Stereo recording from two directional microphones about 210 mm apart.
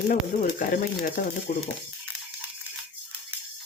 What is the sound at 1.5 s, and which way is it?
Speech, 40° left (ahead or behind).